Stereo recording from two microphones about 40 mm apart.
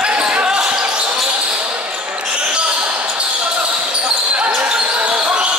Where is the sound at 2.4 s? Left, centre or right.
Right.